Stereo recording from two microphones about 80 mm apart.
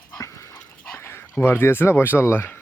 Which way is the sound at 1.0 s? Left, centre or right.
Left.